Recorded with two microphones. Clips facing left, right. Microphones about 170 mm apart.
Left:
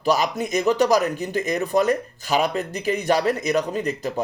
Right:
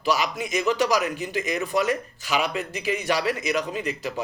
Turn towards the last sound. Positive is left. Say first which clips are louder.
# left 4 dB
turn(degrees=40)  # may be behind; listen again after turning